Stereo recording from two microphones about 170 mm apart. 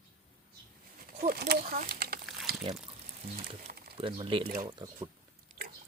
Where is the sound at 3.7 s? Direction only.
65° right (ahead or behind).